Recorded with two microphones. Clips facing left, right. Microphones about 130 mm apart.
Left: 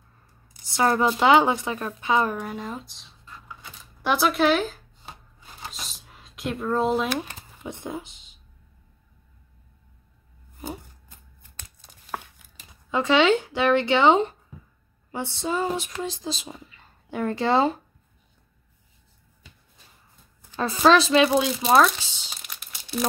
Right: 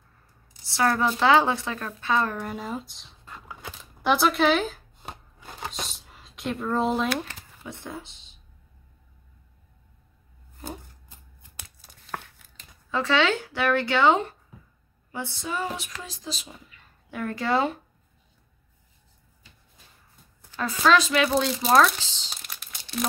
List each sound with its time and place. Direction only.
0.7 s speech: 20° left (ahead or behind)
2.4 s speech: centre (ahead or behind)
5.0 s shuffling cards: 55° right (ahead or behind)
5.7 s a sound: centre (ahead or behind)
7.1 s speech: 15° left (ahead or behind)
12.1 s a sound: 10° left (ahead or behind)
15.0 s speech: 25° left (ahead or behind)
20.5 s a woman's voice: 25° left (ahead or behind)
21.3 s speech: 10° left (ahead or behind)
21.7 s crumpling: 10° left (ahead or behind)